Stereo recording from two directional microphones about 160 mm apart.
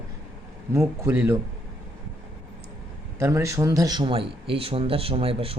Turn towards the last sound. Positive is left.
turn(degrees=-35)  # may be behind; listen again after turning